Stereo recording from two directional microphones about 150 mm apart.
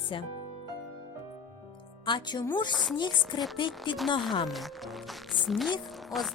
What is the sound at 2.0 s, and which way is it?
Speech, 30° left (ahead or behind).